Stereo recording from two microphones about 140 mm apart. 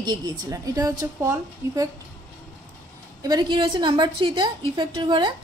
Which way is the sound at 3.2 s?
30° right (ahead or behind).